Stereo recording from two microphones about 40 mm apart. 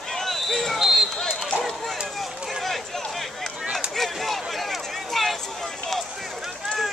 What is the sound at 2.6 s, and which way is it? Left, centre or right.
Run, centre.